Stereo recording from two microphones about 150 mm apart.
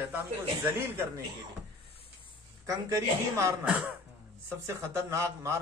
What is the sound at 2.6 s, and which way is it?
A man's voice, 20° right (ahead or behind).